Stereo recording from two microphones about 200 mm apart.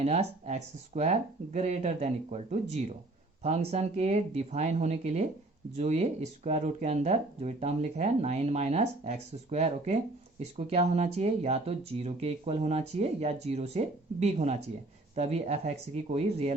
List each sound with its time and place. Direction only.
0.0 s speech: 30° right (ahead or behind)